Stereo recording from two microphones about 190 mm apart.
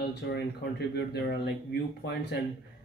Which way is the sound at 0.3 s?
60° left (ahead or behind).